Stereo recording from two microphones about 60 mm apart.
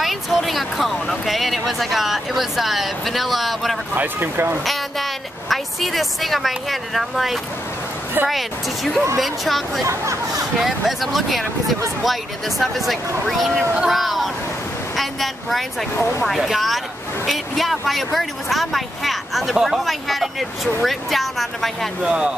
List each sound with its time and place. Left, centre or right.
0.0 s speech: centre
3.9 s speech: right
5.5 s speech: centre
9.8 s speech: right
10.6 s speech: centre
15.0 s a sound: centre
16.3 s speech: centre
22.0 s speech: centre